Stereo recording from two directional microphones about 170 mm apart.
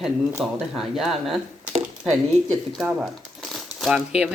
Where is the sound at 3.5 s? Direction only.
Centre (ahead or behind).